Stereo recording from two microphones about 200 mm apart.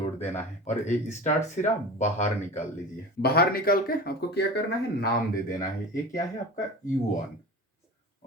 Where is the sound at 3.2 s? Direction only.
50° left (ahead or behind).